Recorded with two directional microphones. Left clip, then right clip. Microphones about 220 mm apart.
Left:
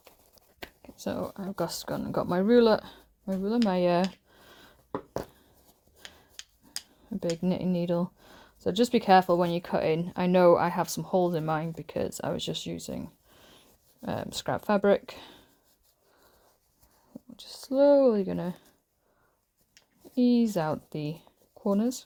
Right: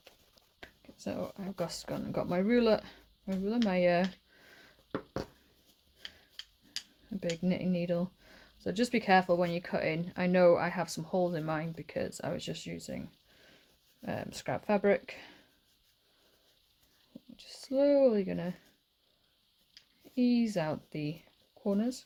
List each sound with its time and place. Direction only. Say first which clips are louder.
0.6 s speech: left 6 dB; 35° left (ahead or behind)
7.4 s speech: left 4 dB; 25° left (ahead or behind)
17.3 s speech: left 5 dB; 20° left (ahead or behind)
20.1 s speech: left 5 dB; 25° left (ahead or behind)